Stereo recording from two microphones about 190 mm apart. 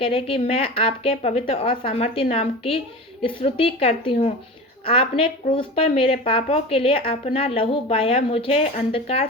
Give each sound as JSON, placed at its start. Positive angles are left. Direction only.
{"t": 0.0, "sound": "a woman's voice", "side_deg": 30}